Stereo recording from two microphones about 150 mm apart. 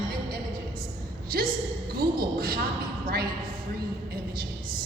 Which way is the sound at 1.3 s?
85° right.